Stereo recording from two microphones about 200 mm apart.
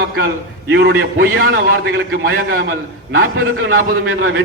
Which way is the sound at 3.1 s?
75° right (ahead or behind).